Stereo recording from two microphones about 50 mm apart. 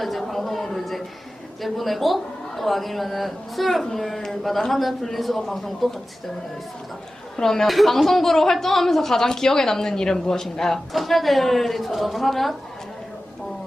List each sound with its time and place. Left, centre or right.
0.0 s a sound: centre
1.6 s speech: centre
7.3 s speech: centre